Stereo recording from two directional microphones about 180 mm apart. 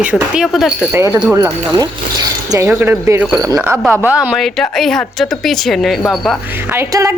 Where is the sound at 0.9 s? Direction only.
15° right (ahead or behind); by 6.4 s centre (ahead or behind).